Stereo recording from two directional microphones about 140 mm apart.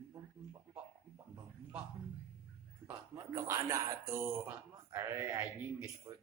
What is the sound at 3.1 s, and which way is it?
A man's voice, 20° right (ahead or behind).